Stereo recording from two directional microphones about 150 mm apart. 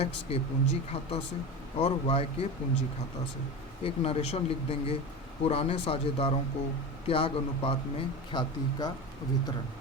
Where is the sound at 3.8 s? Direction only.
40° left (ahead or behind).